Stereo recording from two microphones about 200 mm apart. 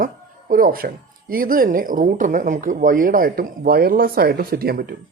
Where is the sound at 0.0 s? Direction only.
45° right (ahead or behind).